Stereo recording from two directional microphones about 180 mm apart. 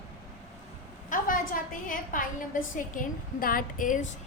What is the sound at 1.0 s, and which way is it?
A woman's voice, 45° left (ahead or behind).